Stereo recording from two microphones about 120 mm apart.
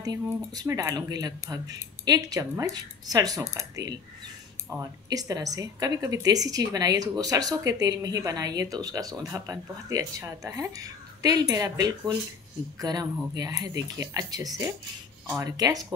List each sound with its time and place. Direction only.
0.0 s a woman's voice: 30° right (ahead or behind)